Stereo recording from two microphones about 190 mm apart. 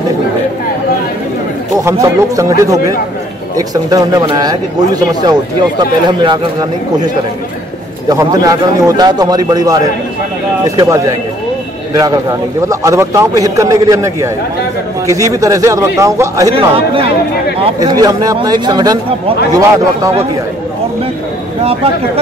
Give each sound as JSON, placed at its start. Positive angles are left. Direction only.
{"t": 1.8, "sound": "a man's voice", "side_deg": -15}
{"t": 8.1, "sound": "a man's voice", "side_deg": -20}
{"t": 16.5, "sound": "speech", "side_deg": -30}
{"t": 17.7, "sound": "speech", "side_deg": -20}